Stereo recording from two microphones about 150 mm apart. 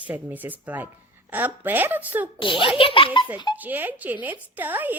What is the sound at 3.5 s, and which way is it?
Speech, 10° right (ahead or behind).